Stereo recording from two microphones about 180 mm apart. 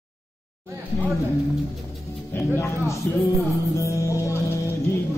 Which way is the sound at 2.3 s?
15° left (ahead or behind).